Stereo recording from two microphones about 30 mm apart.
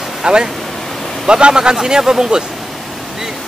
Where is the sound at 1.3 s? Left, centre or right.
Right.